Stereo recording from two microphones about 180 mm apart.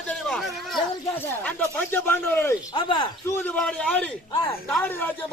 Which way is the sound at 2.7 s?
25° left (ahead or behind).